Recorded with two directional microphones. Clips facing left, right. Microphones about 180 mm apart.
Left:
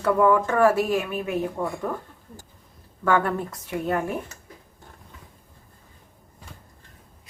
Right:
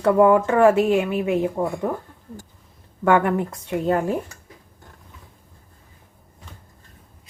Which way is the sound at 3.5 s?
30° right (ahead or behind).